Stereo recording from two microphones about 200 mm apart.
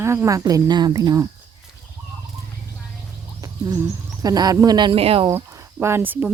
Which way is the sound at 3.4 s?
15° right (ahead or behind).